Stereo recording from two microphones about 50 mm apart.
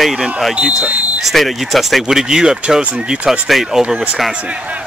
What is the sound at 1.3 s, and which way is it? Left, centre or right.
Speech, centre.